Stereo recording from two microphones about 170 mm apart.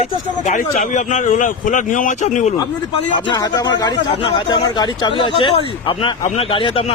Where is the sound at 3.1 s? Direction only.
25° left (ahead or behind).